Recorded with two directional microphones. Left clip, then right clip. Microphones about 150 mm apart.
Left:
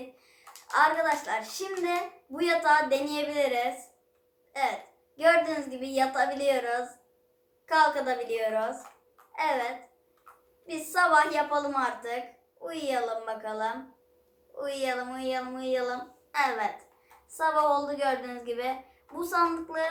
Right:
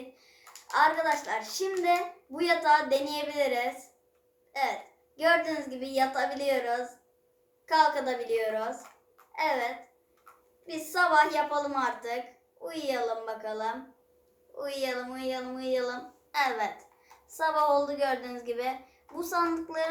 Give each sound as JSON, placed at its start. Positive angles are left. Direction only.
{"t": 0.7, "sound": "a woman's voice", "side_deg": -25}
{"t": 5.1, "sound": "a woman's voice", "side_deg": -25}